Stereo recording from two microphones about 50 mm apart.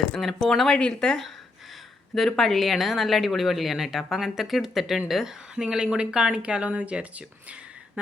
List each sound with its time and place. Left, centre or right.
0.1 s a woman's voice: centre
0.7 s a woman's voice: centre; by 7.3 s right